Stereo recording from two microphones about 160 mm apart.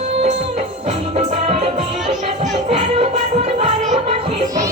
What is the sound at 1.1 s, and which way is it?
Music, 40° right (ahead or behind).